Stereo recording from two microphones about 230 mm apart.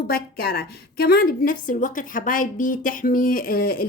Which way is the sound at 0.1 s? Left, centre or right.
Left.